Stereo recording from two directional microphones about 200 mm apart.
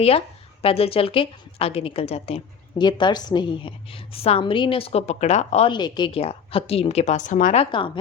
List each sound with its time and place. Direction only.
0.6 s a woman's voice: 30° left (ahead or behind)